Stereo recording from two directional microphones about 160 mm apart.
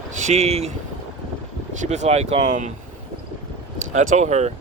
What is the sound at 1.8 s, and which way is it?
Speech, 45° right (ahead or behind).